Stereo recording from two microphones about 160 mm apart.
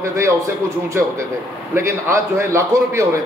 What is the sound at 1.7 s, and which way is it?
A man's voice, 15° right (ahead or behind).